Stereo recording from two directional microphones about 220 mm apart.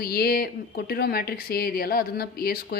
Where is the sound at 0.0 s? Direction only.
45° left (ahead or behind).